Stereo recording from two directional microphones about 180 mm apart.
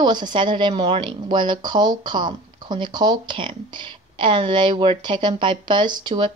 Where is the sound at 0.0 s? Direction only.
25° right (ahead or behind).